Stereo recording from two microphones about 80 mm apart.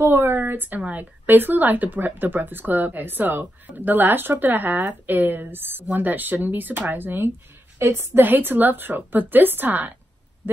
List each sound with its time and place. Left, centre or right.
0.0 s speech: right